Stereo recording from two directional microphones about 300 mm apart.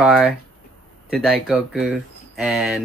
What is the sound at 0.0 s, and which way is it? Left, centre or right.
Speech, centre.